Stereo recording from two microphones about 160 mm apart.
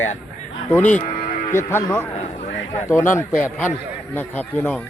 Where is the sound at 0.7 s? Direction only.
10° left (ahead or behind).